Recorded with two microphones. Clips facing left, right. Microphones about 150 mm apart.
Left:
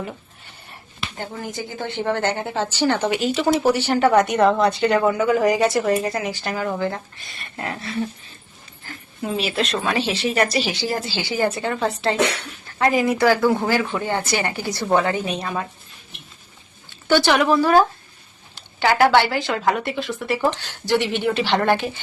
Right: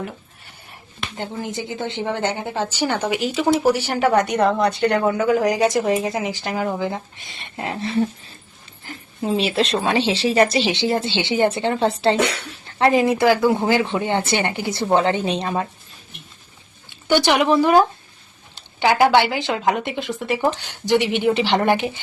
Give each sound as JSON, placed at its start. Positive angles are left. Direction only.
{"t": 0.7, "sound": "speech", "side_deg": -20}
{"t": 4.2, "sound": "a woman's voice", "side_deg": 0}
{"t": 5.5, "sound": "speech", "side_deg": -15}
{"t": 17.1, "sound": "speech", "side_deg": -15}